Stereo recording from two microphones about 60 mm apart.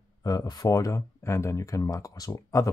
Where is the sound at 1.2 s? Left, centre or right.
Left.